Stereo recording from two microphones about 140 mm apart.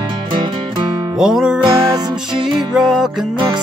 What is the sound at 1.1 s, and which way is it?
Music, 5° right (ahead or behind).